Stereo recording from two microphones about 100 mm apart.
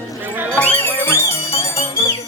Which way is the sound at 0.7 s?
25° left (ahead or behind).